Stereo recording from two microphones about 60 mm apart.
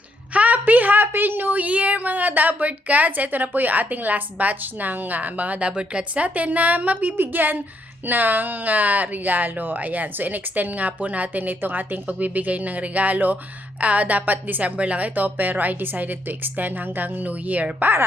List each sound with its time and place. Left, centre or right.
0.3 s a woman's voice: right